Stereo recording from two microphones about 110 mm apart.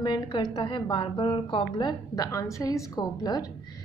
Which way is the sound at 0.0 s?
40° left (ahead or behind).